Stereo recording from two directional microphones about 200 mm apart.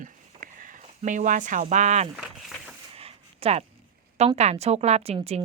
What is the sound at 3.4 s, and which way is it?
A woman's voice, 30° right (ahead or behind).